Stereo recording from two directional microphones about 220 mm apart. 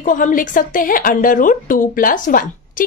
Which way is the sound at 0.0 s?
35° left (ahead or behind).